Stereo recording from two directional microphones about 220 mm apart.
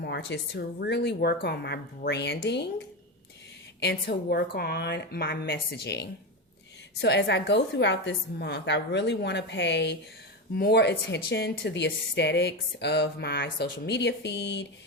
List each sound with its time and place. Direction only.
0.0 s a woman's voice: 50° left (ahead or behind)